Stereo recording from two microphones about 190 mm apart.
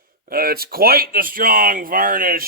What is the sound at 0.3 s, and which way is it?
Speech, 50° right (ahead or behind).